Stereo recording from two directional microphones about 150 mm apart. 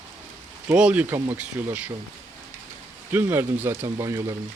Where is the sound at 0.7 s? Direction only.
10° right (ahead or behind).